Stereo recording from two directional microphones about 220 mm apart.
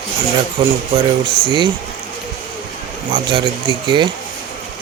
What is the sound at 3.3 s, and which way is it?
Speech, 20° right (ahead or behind).